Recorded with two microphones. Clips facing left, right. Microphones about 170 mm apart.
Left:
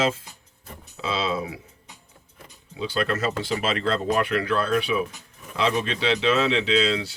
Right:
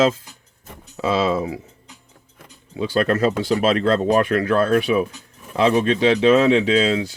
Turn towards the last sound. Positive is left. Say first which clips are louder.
# right 6 dB
turn(degrees=-50)  # may be behind; listen again after turning